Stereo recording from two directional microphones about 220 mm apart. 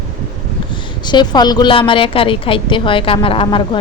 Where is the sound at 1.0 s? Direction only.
20° left (ahead or behind).